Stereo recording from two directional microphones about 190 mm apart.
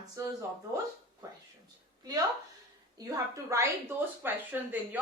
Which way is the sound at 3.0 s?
20° right (ahead or behind).